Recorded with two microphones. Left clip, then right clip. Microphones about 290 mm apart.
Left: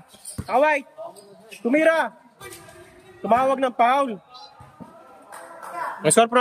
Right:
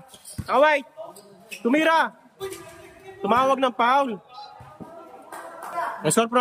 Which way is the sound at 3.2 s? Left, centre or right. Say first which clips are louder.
Even; centre.